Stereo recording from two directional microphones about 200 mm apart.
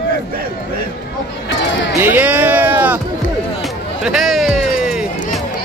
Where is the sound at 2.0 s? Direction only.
10° right (ahead or behind).